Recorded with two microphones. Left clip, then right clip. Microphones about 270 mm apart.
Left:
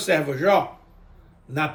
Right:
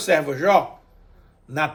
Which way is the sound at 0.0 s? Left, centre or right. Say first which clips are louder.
Right 2 dB; centre.